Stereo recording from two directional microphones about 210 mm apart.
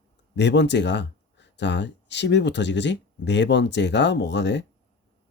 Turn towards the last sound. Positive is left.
turn(degrees=55)  # may be behind; listen again after turning